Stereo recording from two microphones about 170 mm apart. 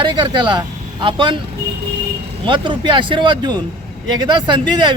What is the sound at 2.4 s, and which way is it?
Speech, 30° right (ahead or behind).